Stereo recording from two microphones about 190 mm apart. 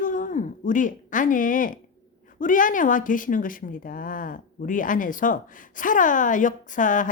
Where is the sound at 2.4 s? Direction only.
45° left (ahead or behind).